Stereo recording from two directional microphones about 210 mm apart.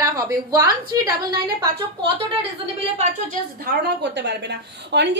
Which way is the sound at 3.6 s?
55° right (ahead or behind).